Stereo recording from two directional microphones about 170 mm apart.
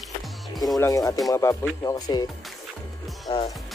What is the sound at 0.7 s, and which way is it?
Speech, 20° left (ahead or behind).